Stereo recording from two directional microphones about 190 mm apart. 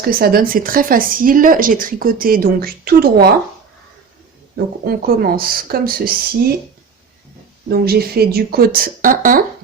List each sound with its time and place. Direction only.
0.0 s speech: 50° right (ahead or behind)
4.5 s speech: 50° right (ahead or behind)
7.7 s speech: 55° right (ahead or behind)